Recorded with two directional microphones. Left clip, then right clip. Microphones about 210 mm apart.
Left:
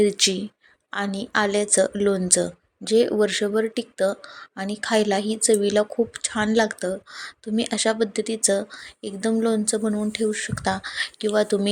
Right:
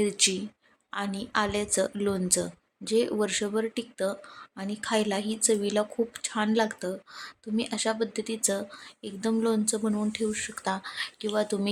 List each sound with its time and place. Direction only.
0.0 s a woman's voice: 15° left (ahead or behind)